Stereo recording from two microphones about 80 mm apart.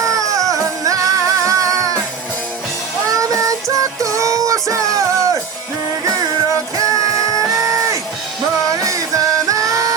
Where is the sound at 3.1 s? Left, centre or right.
Right.